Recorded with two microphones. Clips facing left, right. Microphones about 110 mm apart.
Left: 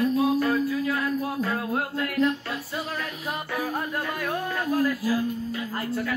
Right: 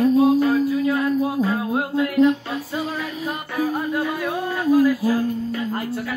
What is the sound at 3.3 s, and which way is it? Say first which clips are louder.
Speech: right 5 dB; centre (ahead or behind).